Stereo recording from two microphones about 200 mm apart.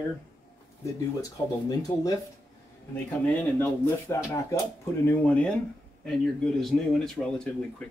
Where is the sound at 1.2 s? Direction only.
20° left (ahead or behind).